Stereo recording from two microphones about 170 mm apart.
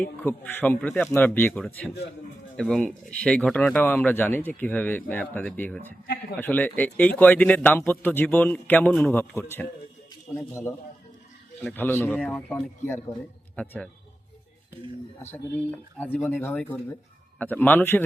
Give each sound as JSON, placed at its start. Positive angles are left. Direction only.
{"t": 0.2, "sound": "speech", "side_deg": 10}
{"t": 15.3, "sound": "speech", "side_deg": 10}